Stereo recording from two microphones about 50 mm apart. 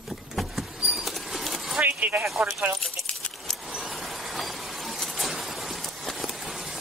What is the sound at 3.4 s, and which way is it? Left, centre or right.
Vehicle, centre.